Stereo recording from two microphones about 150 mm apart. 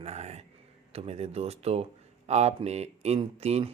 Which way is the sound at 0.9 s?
45° right (ahead or behind).